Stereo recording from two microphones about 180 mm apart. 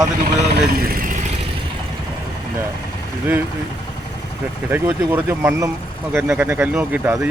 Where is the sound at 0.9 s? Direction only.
50° right (ahead or behind).